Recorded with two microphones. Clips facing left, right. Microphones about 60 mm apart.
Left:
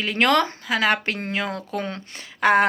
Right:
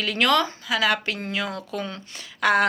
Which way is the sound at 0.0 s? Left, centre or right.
Left.